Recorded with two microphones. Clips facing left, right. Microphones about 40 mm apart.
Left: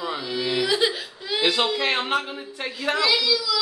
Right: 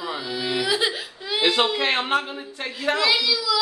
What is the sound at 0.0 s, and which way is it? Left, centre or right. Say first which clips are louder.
Whimper: left 1 dB; centre.